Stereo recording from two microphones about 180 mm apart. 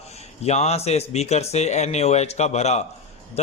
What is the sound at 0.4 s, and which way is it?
A man's voice, 35° left (ahead or behind).